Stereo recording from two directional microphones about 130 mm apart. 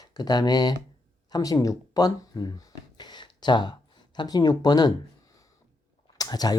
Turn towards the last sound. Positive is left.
turn(degrees=30)  # may be behind; listen again after turning